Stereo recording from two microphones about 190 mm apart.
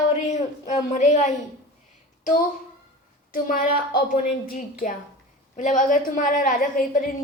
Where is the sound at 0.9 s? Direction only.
40° left (ahead or behind).